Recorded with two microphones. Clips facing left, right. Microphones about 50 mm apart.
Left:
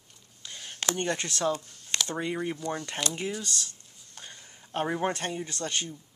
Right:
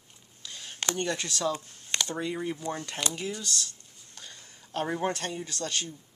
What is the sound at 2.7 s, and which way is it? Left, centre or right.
Speech, left.